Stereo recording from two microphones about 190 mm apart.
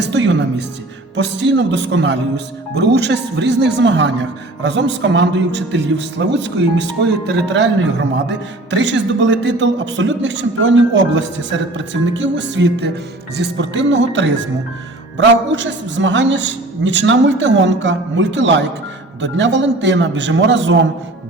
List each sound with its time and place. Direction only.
0.0 s music: 70° right (ahead or behind)
1.1 s speech: 65° right (ahead or behind)